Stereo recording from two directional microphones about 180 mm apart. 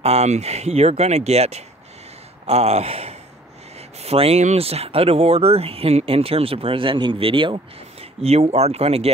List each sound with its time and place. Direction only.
0.0 s speech: 35° right (ahead or behind)